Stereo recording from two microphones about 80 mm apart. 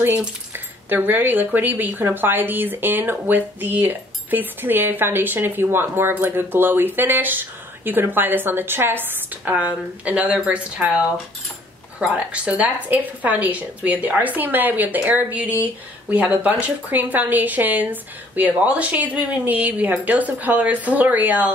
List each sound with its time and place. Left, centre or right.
0.8 s a woman's voice: right
12.1 s a woman's voice: centre